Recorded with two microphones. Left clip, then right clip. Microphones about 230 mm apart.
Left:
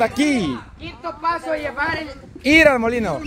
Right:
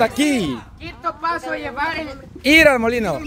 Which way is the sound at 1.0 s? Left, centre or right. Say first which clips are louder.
Even; right.